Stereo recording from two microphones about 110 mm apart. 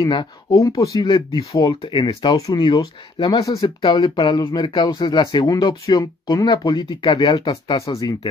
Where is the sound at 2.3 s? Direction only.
35° left (ahead or behind).